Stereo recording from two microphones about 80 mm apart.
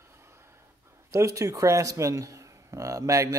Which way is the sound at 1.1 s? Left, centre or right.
Right.